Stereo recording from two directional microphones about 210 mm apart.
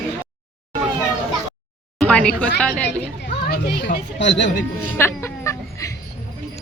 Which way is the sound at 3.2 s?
45° left (ahead or behind).